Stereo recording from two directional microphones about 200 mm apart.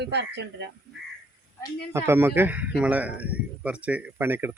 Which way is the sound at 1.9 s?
10° right (ahead or behind).